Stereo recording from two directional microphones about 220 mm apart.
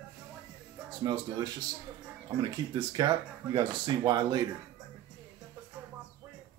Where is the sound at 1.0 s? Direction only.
20° right (ahead or behind).